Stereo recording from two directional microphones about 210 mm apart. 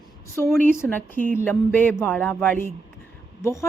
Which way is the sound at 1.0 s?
40° right (ahead or behind).